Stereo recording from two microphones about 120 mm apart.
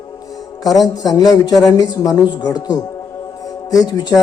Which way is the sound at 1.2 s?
Centre (ahead or behind).